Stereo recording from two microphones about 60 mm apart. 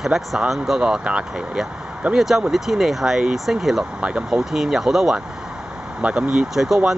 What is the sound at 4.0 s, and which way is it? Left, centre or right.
Speech, centre.